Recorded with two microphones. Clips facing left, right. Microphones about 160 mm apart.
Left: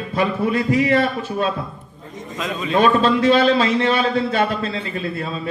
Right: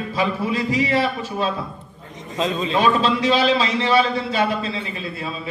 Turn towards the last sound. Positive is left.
turn(degrees=55)  # may be behind; listen again after turning